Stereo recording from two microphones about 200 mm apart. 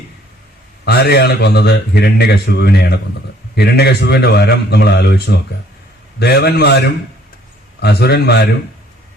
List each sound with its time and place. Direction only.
0.9 s a man's voice: 55° left (ahead or behind)